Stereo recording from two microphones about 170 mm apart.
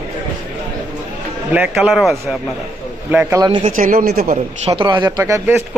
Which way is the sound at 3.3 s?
25° right (ahead or behind).